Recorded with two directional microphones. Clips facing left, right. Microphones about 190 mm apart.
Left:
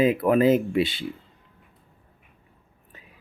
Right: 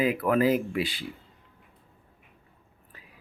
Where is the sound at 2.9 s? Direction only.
25° left (ahead or behind).